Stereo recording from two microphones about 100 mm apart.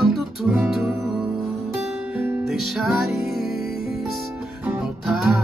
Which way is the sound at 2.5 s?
5° right (ahead or behind).